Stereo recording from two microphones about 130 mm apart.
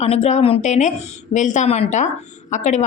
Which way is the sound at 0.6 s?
65° left (ahead or behind).